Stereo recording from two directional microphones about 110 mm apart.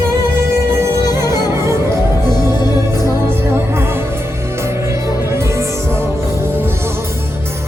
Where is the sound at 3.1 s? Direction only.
25° right (ahead or behind).